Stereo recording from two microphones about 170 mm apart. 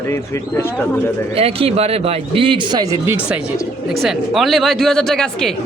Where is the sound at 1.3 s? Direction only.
35° right (ahead or behind); by 3.1 s 20° right (ahead or behind).